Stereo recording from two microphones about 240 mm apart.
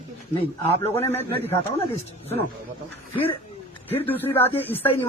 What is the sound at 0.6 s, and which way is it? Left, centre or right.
Speech, centre.